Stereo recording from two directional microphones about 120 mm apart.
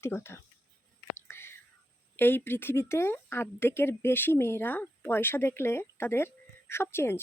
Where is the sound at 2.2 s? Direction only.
15° left (ahead or behind).